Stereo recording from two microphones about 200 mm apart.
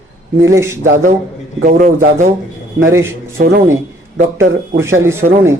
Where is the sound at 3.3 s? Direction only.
45° right (ahead or behind).